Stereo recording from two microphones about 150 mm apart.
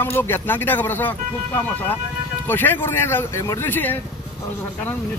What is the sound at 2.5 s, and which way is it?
A man's voice, 15° left (ahead or behind).